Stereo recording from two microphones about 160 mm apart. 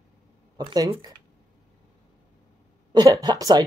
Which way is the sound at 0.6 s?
25° right (ahead or behind).